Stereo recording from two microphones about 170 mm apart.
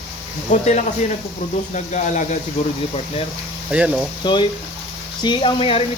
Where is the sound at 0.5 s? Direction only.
45° left (ahead or behind).